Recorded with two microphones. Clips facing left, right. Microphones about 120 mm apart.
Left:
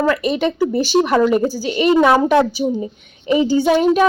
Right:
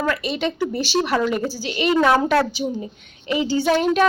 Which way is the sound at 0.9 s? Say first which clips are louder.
Left 6 dB; 15° left (ahead or behind).